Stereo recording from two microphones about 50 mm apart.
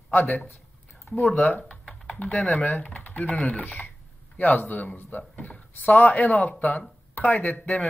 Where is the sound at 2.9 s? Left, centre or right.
Left.